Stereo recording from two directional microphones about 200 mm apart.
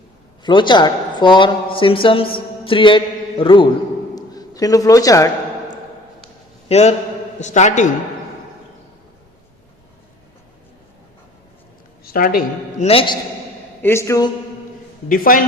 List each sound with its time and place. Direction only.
0.4 s speech: 25° left (ahead or behind)
4.1 s a sound: 20° left (ahead or behind)
6.7 s a man's voice: 30° left (ahead or behind)
12.0 s a woman's voice: 45° left (ahead or behind)
12.8 s a man's voice: 30° left (ahead or behind)
13.8 s speech: 15° left (ahead or behind)
15.1 s speech: 45° left (ahead or behind)